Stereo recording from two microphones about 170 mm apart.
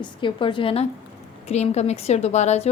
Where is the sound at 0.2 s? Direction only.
30° left (ahead or behind).